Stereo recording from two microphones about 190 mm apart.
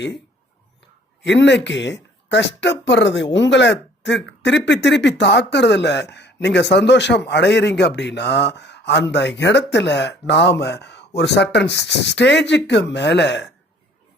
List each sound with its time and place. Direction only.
1.2 s speech: 70° left (ahead or behind)